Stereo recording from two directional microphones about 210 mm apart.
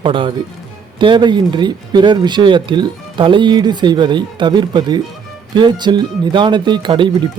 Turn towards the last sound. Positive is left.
turn(degrees=-25)  # may be behind; listen again after turning